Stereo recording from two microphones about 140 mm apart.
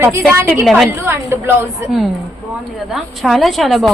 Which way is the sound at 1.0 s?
15° right (ahead or behind).